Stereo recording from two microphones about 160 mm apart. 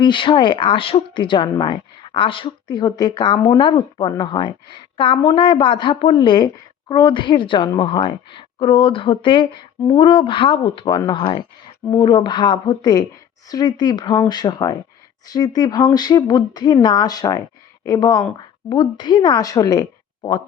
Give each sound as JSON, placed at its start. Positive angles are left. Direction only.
{"t": 0.0, "sound": "a woman's voice", "side_deg": 30}